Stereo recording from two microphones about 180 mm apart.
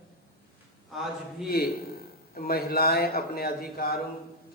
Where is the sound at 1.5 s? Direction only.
55° left (ahead or behind).